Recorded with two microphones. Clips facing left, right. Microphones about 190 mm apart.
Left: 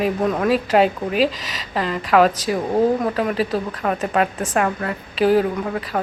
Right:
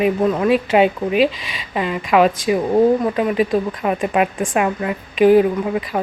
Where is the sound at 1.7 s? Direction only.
10° right (ahead or behind).